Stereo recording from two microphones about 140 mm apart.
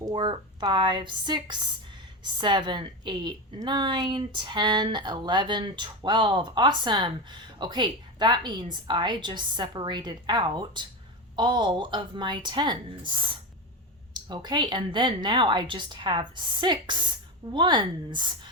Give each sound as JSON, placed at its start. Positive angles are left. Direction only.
{"t": 0.0, "sound": "a woman's voice", "side_deg": -35}